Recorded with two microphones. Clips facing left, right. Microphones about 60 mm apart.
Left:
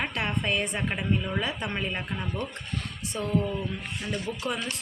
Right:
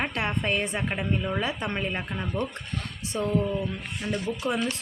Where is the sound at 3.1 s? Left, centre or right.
Right.